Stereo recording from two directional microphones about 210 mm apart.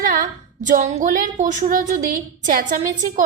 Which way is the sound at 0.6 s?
40° right (ahead or behind).